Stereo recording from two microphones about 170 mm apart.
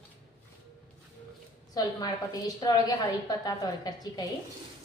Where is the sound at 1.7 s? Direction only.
20° left (ahead or behind).